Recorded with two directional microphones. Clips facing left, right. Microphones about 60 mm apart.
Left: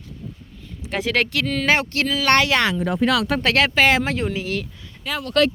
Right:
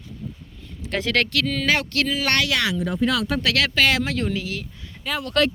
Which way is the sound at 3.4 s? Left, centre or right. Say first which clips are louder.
Left 4 dB; left.